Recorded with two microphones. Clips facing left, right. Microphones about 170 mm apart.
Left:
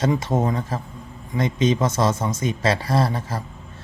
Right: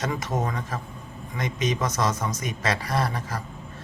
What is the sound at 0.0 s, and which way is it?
Speech, 30° left (ahead or behind).